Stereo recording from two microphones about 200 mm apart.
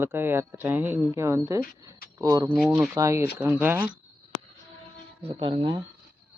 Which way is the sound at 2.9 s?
15° right (ahead or behind).